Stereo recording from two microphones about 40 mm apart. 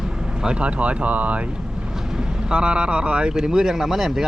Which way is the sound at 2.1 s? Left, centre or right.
Right.